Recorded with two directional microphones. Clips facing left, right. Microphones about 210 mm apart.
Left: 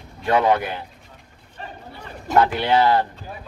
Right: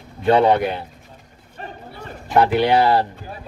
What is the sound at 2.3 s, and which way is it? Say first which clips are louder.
Speech: right 2 dB; 20° right (ahead or behind).